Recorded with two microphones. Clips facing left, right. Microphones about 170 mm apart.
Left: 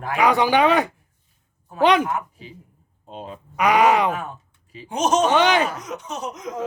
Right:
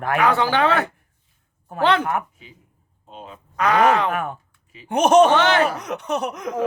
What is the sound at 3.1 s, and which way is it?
Speech, 35° left (ahead or behind).